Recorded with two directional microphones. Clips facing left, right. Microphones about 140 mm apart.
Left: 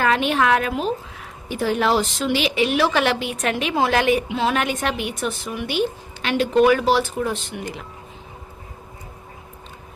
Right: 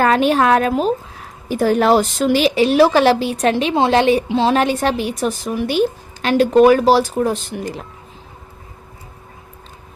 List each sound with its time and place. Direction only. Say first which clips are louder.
0.0 s a woman's voice: right 5 dB; 40° right (ahead or behind)